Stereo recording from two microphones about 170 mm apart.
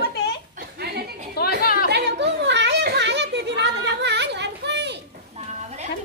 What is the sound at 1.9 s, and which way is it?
Children playing, 80° right.